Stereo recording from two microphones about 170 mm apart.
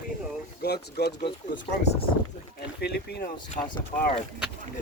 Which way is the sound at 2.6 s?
75° left (ahead or behind).